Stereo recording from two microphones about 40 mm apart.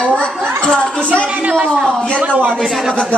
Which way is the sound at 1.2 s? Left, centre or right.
Right.